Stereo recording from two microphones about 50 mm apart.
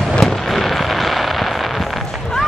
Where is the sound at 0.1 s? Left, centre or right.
Centre.